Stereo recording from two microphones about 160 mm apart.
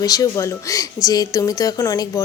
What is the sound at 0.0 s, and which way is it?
A woman's voice, 20° left (ahead or behind).